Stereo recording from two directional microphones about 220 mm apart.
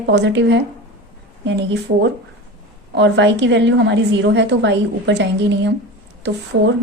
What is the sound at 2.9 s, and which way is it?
A woman's voice, 55° right (ahead or behind).